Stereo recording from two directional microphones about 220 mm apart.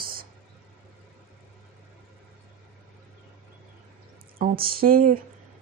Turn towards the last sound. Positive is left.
turn(degrees=-40)  # may be behind; listen again after turning